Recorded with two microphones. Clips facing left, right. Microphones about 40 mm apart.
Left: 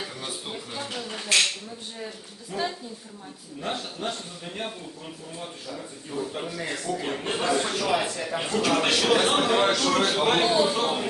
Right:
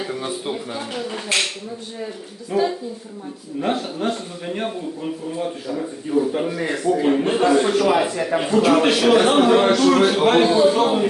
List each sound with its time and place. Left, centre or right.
0.1 s a man's voice: right
4.1 s a man's voice: right
8.1 s a man's voice: right
8.4 s a man's voice: centre